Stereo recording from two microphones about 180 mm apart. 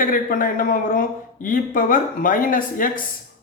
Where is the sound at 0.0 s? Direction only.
50° left (ahead or behind).